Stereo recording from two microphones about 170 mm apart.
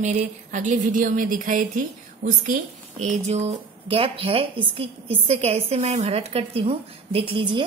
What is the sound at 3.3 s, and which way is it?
A woman's voice, 40° right (ahead or behind).